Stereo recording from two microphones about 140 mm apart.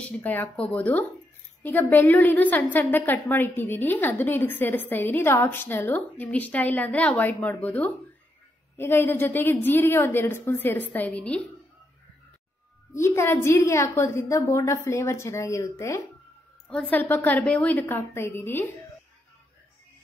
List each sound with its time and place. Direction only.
0.0 s a woman's voice: 10° left (ahead or behind)
12.9 s a woman's voice: 20° left (ahead or behind)
16.6 s a woman's voice: 10° left (ahead or behind)